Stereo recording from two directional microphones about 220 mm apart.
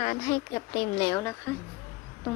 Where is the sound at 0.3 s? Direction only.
35° left (ahead or behind).